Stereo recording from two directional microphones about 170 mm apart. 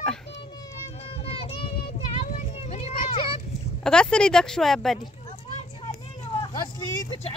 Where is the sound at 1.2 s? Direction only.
35° left (ahead or behind).